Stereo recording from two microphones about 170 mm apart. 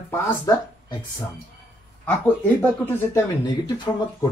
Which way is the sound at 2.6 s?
10° left (ahead or behind).